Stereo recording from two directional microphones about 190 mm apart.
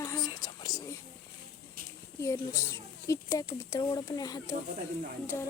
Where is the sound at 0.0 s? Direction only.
20° left (ahead or behind).